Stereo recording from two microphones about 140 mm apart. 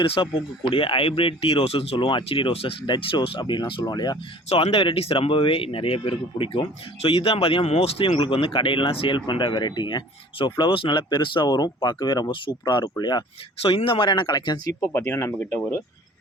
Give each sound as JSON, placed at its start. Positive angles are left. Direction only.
{"t": 0.0, "sound": "speech", "side_deg": 40}
{"t": 4.4, "sound": "speech", "side_deg": 45}